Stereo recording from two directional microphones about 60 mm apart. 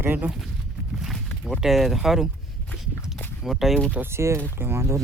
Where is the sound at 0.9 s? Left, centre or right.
Centre.